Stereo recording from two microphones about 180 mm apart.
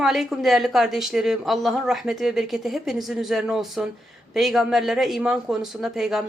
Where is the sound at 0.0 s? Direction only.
Centre (ahead or behind).